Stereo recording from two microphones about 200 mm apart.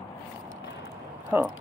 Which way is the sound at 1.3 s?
10° right (ahead or behind).